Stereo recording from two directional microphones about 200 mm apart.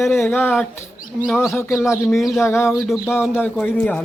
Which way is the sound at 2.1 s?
Centre (ahead or behind).